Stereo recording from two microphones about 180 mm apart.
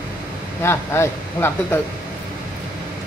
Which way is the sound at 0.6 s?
15° left (ahead or behind).